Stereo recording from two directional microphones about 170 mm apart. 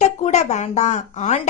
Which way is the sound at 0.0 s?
40° left (ahead or behind).